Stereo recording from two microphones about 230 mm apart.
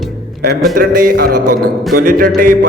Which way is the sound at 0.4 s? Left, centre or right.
Right.